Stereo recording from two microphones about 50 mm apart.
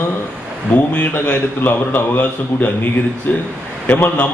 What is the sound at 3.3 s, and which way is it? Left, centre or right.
Speech, left.